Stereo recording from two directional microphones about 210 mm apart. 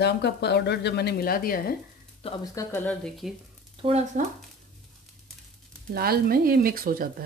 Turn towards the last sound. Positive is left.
turn(degrees=-45)  # may be behind; listen again after turning